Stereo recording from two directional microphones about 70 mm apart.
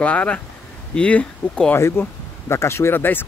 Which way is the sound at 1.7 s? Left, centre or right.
Left.